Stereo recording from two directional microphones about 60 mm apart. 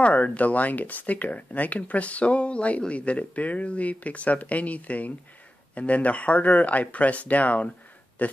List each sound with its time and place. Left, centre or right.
0.0 s speech: left